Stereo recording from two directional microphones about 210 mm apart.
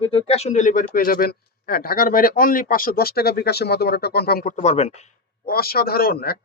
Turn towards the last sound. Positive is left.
turn(degrees=45)  # may be behind; listen again after turning